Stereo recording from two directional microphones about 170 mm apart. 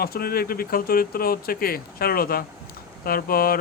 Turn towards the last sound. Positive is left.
turn(degrees=60)  # may be behind; listen again after turning